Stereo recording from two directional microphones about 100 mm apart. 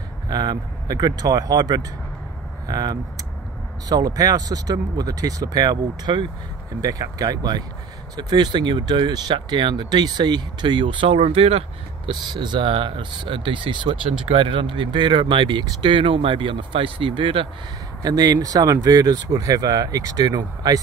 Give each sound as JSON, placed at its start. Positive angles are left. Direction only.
{"t": 0.3, "sound": "speech", "side_deg": -40}
{"t": 12.1, "sound": "speech", "side_deg": -50}
{"t": 18.0, "sound": "speech", "side_deg": -40}